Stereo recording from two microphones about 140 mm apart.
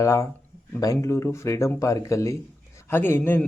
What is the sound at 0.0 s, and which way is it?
Speech, 20° left (ahead or behind).